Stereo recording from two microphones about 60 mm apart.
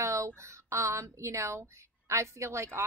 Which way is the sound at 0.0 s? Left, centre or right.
Right.